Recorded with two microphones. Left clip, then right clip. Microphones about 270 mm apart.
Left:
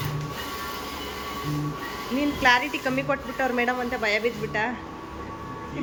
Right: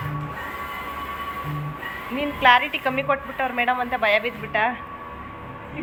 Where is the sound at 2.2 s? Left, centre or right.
Centre.